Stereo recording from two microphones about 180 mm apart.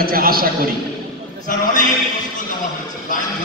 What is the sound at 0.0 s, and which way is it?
Speech, 55° right (ahead or behind).